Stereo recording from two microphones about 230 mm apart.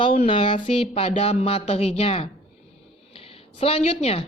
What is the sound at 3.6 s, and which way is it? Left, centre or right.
Speech, left.